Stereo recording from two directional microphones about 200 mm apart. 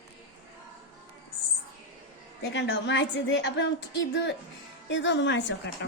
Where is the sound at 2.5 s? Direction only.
60° left (ahead or behind).